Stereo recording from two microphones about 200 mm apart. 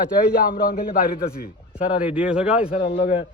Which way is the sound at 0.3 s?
45° left (ahead or behind).